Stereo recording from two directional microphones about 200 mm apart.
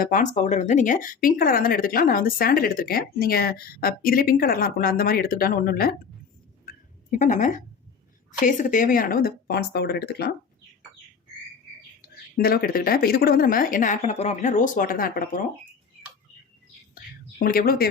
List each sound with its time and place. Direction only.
0.0 s a woman's voice: 40° left (ahead or behind)
6.7 s a sound: 40° left (ahead or behind)
8.3 s a woman's voice: 40° left (ahead or behind)
12.0 s a woman's voice: 50° left (ahead or behind)
17.4 s a woman's voice: 45° left (ahead or behind)